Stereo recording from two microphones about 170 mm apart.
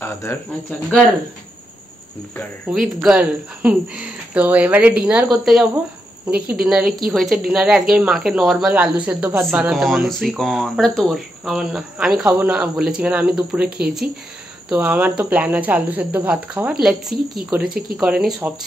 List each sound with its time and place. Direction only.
0.0 s speech: 15° left (ahead or behind)
2.7 s speech: 5° right (ahead or behind)
17.6 s speech: 60° right (ahead or behind)
17.9 s speech: 5° right (ahead or behind)